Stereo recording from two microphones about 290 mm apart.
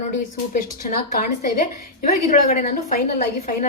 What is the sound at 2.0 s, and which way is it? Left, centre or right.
A woman's voice, left.